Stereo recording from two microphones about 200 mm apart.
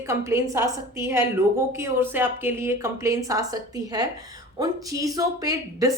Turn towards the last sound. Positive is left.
turn(degrees=-15)  # may be behind; listen again after turning